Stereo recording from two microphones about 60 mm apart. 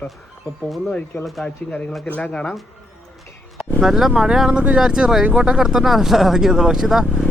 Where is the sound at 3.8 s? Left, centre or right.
Centre.